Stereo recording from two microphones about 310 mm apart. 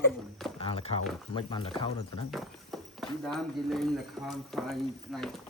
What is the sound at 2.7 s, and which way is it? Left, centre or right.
Clip-clop, centre.